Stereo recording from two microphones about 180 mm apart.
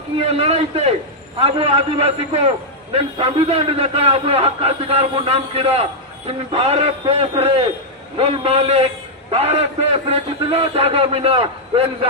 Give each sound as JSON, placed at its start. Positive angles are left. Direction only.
{"t": 0.3, "sound": "a man's voice", "side_deg": -35}